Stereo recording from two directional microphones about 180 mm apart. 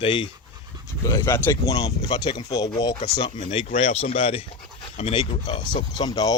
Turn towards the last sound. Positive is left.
turn(degrees=20)  # may be behind; listen again after turning